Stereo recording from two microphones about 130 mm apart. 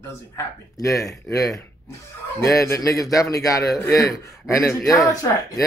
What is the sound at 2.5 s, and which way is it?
A man's voice, 25° left (ahead or behind).